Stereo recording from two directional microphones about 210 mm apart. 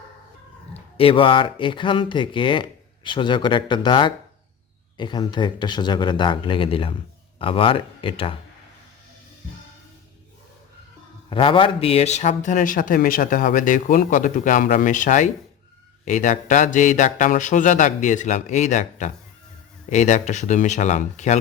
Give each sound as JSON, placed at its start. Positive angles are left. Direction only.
{"t": 0.9, "sound": "speech", "side_deg": 25}
{"t": 11.3, "sound": "a man's voice", "side_deg": 25}